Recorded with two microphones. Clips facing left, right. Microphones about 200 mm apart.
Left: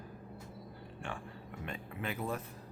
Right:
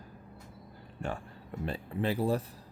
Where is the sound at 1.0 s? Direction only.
40° right (ahead or behind).